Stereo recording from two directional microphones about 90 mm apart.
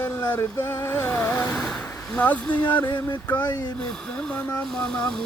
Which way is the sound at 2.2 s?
20° left (ahead or behind).